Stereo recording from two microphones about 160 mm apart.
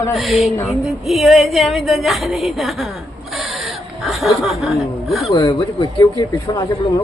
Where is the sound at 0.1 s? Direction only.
Centre (ahead or behind).